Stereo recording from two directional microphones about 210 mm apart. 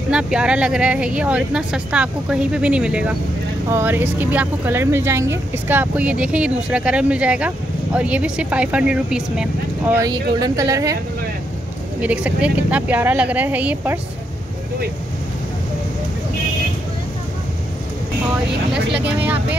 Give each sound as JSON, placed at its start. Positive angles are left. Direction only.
{"t": 0.1, "sound": "speech", "side_deg": -5}
{"t": 9.9, "sound": "speech", "side_deg": -15}
{"t": 12.0, "sound": "speech", "side_deg": -5}
{"t": 18.7, "sound": "speech", "side_deg": -5}